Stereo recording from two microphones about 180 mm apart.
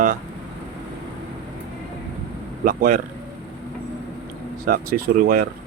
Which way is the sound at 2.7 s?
50° right (ahead or behind).